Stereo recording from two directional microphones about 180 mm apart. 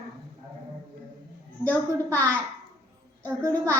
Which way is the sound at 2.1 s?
15° right (ahead or behind).